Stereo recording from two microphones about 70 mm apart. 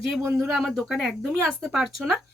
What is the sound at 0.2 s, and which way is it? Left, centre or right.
Speech, right.